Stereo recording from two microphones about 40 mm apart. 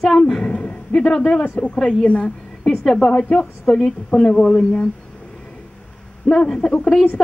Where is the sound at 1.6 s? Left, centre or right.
Left.